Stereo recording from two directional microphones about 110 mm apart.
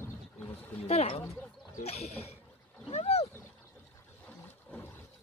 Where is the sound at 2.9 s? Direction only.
70° left (ahead or behind).